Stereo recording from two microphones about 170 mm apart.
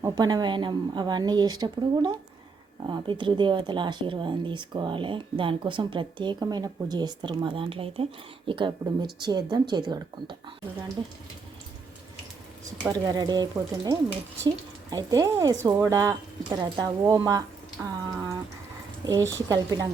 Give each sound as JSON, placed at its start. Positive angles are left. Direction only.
{"t": 0.0, "sound": "speech", "side_deg": -25}
{"t": 12.9, "sound": "speech", "side_deg": -20}
{"t": 17.8, "sound": "speech", "side_deg": -5}
{"t": 19.0, "sound": "speech", "side_deg": -20}